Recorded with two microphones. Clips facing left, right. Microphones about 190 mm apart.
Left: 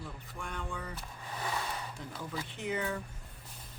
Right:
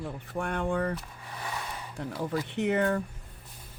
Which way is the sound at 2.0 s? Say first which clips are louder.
Right 9 dB; 65° right (ahead or behind).